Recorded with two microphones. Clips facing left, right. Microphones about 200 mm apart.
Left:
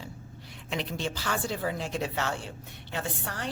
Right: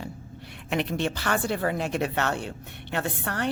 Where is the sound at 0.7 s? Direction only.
65° right (ahead or behind).